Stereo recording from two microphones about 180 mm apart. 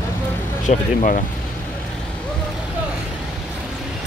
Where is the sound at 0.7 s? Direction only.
45° left (ahead or behind).